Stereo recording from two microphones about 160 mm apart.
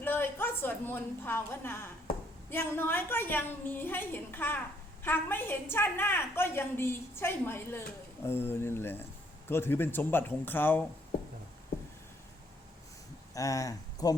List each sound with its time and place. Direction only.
0.0 s a woman's voice: 15° left (ahead or behind)
13.3 s speech: 20° left (ahead or behind)